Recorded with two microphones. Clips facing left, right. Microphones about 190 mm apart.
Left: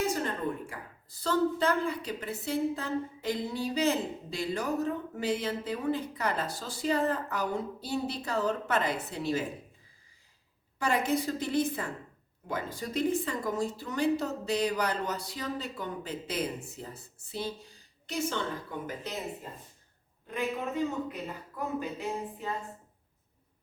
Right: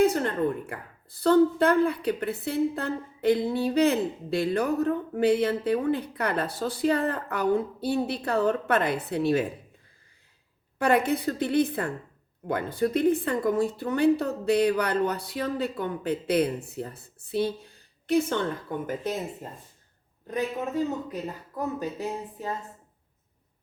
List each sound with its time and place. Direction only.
0.0 s a sound: 60° right (ahead or behind)
1.2 s a woman's voice: 60° right (ahead or behind)
10.8 s a woman's voice: 60° right (ahead or behind)
20.3 s a man's voice: 40° right (ahead or behind)